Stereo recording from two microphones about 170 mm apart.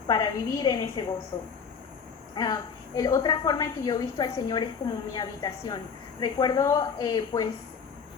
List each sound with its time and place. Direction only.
0.1 s a woman's voice: 25° left (ahead or behind)
2.3 s a woman's voice: 25° left (ahead or behind)